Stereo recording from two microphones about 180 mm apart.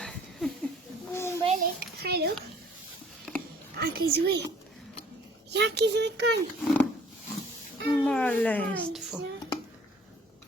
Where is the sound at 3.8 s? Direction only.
65° right (ahead or behind).